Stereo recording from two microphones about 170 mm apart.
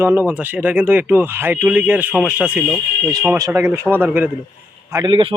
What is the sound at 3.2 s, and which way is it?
Speech, 15° right (ahead or behind).